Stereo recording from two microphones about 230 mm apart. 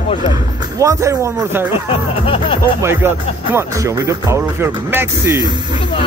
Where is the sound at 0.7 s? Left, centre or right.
Centre.